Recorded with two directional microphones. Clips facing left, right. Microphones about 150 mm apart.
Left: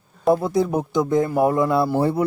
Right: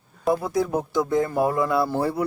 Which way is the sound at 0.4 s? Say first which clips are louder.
Left 3 dB; 20° left (ahead or behind).